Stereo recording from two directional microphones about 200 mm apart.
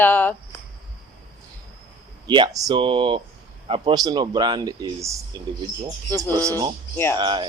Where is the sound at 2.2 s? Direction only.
20° right (ahead or behind).